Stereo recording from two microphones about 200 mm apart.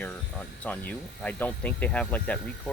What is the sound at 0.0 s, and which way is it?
Speech, 5° left (ahead or behind).